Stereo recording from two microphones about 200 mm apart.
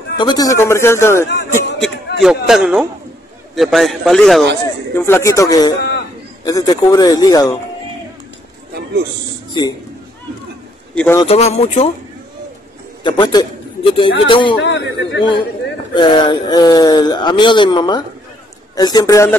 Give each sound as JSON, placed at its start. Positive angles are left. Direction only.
{"t": 0.2, "sound": "a man's voice", "side_deg": 20}
{"t": 1.8, "sound": "a man's voice", "side_deg": 0}
{"t": 4.9, "sound": "a man's voice", "side_deg": 10}
{"t": 9.5, "sound": "speech", "side_deg": 20}
{"t": 11.0, "sound": "a man's voice", "side_deg": 10}
{"t": 11.2, "sound": "speech", "side_deg": 35}
{"t": 13.0, "sound": "a man's voice", "side_deg": 20}
{"t": 14.6, "sound": "a man's voice", "side_deg": 60}
{"t": 15.9, "sound": "speech", "side_deg": 25}